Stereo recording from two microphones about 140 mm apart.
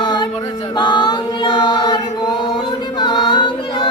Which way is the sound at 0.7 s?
35° left (ahead or behind).